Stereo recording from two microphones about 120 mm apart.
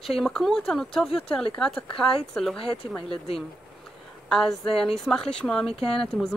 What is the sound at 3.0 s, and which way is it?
Speech, 45° left (ahead or behind).